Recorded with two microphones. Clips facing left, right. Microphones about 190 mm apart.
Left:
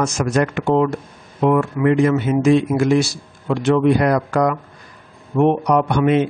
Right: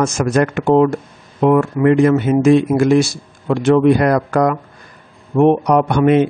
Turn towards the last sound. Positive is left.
turn(degrees=-50)  # may be behind; listen again after turning